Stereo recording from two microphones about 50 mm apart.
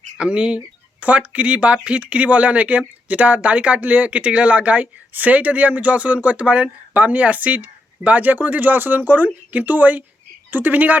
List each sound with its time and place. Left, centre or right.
0.2 s speech: right